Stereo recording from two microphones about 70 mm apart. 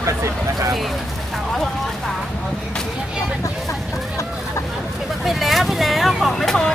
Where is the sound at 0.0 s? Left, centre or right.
Right.